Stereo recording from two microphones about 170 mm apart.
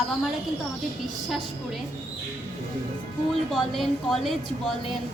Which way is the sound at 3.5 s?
Centre (ahead or behind).